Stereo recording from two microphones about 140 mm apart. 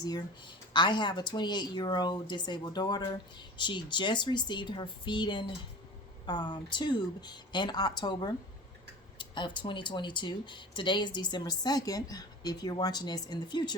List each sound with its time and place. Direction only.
0.7 s speech: 35° left (ahead or behind)